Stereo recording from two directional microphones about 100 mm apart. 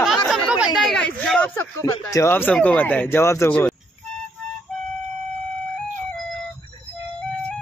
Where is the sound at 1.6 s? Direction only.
25° left (ahead or behind).